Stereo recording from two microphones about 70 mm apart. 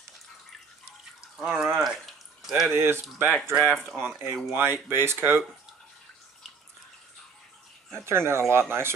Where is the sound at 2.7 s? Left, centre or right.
Right.